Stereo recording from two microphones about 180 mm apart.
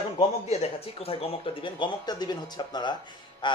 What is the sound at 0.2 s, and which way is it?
Speech, 35° left (ahead or behind).